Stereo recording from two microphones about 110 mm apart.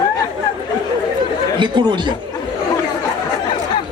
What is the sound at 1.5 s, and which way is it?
Speech, 45° right (ahead or behind).